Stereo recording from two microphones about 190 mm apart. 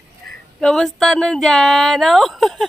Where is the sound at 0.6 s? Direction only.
Centre (ahead or behind).